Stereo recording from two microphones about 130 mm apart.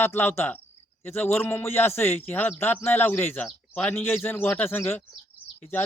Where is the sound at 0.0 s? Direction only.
15° left (ahead or behind).